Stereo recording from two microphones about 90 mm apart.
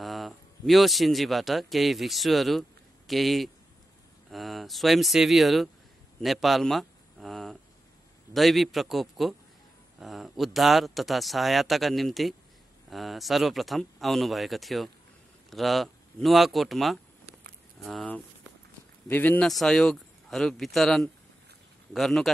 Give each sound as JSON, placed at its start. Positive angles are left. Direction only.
{"t": 0.0, "sound": "a man's voice", "side_deg": 0}
{"t": 19.0, "sound": "speech", "side_deg": 20}
{"t": 19.4, "sound": "speech", "side_deg": 5}